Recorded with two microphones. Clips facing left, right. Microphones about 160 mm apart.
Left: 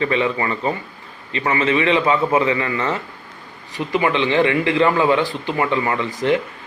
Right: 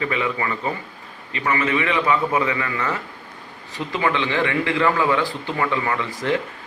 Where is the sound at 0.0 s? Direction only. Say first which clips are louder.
Left 4 dB; 30° left (ahead or behind).